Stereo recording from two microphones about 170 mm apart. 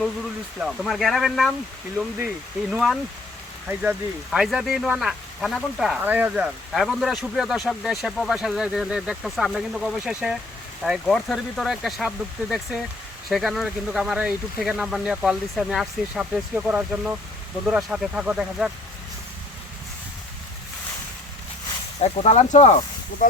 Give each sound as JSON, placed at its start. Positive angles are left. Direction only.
{"t": 0.6, "sound": "speech", "side_deg": 0}
{"t": 4.3, "sound": "speech", "side_deg": 0}
{"t": 22.0, "sound": "speech", "side_deg": 40}